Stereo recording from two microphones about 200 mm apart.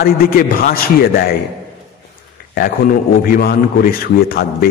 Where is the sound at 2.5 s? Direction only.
45° left (ahead or behind).